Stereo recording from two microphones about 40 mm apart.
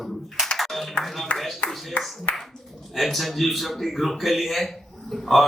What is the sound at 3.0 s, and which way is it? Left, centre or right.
A man's voice, centre.